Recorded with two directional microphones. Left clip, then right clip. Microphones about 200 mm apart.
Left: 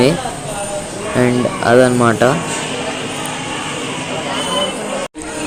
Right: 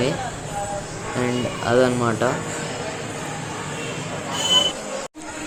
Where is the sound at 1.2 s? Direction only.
35° left (ahead or behind).